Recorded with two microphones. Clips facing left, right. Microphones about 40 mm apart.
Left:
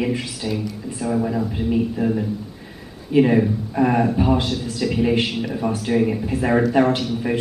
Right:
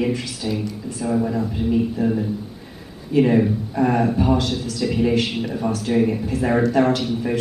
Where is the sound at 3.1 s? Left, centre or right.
Left.